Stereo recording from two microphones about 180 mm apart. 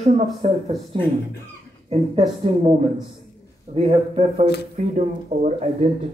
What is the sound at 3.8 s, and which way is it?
Speech, 40° right (ahead or behind).